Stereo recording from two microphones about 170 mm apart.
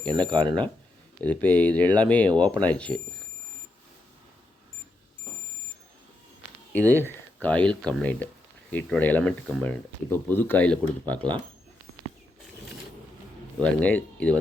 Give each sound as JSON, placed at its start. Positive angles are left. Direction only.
{"t": 0.1, "sound": "speech", "side_deg": -25}
{"t": 1.2, "sound": "speech", "side_deg": 10}
{"t": 6.9, "sound": "a sound", "side_deg": -15}
{"t": 7.4, "sound": "speech", "side_deg": 5}
{"t": 13.6, "sound": "speech", "side_deg": 10}